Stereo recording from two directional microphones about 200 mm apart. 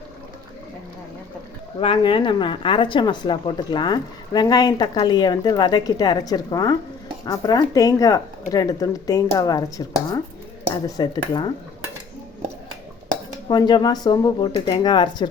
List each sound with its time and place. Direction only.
1.8 s a woman's voice: 25° left (ahead or behind)
13.5 s speech: 20° left (ahead or behind)